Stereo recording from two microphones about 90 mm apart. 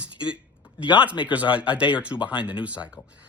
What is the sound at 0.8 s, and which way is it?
Speech, 65° left (ahead or behind).